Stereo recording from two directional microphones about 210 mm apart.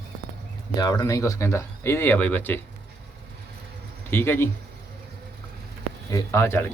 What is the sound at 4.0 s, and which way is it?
Speech, 10° left (ahead or behind).